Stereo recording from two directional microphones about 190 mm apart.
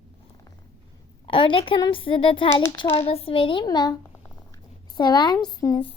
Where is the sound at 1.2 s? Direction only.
25° left (ahead or behind).